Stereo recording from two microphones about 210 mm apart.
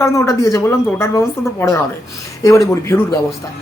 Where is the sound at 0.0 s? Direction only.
15° left (ahead or behind).